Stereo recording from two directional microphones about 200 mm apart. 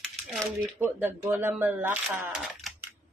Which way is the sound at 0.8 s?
10° right (ahead or behind).